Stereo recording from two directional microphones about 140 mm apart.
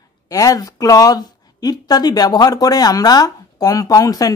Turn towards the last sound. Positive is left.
turn(degrees=25)  # may be behind; listen again after turning